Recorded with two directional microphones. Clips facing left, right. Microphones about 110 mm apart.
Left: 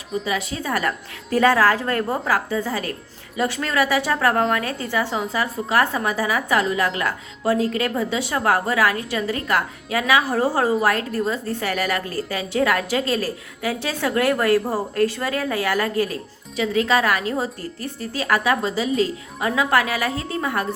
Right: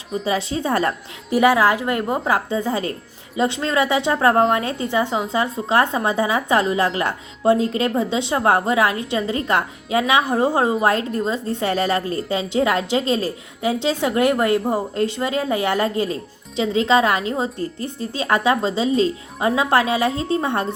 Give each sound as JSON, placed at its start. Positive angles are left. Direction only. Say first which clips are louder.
{"t": 0.3, "sound": "a woman's voice", "louder": "right 6 dB", "side_deg": -30}
{"t": 1.3, "sound": "a woman's voice", "louder": "right 1 dB", "side_deg": -15}